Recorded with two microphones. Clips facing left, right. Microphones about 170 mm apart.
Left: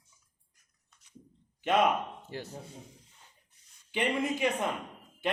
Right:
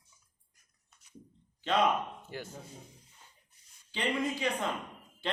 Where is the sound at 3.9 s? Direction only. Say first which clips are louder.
Left 2 dB; 20° left (ahead or behind).